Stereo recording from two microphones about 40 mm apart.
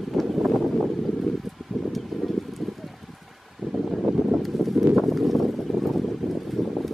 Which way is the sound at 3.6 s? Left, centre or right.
Centre.